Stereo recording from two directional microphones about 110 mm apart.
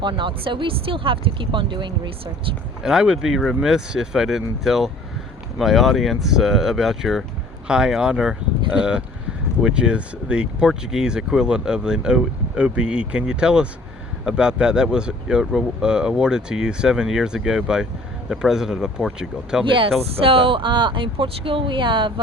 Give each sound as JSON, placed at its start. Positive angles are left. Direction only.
{"t": 0.0, "sound": "speech", "side_deg": -45}
{"t": 2.8, "sound": "speech", "side_deg": -5}
{"t": 19.6, "sound": "speech", "side_deg": -50}